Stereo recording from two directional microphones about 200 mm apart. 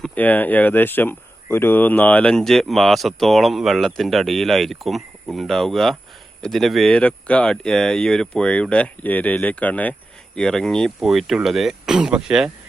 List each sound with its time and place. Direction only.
0.0 s speech: 5° left (ahead or behind)